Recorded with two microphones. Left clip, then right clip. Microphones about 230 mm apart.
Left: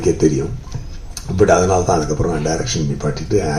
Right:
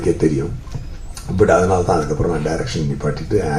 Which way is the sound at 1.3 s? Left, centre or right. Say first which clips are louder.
Left 1 dB; left.